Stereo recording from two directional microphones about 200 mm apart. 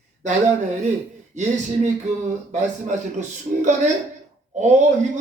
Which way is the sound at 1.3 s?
35° right (ahead or behind).